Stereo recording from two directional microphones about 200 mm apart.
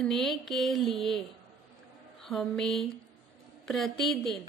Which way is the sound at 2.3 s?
Centre (ahead or behind).